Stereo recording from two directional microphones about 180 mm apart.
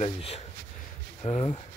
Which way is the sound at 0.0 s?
35° left (ahead or behind).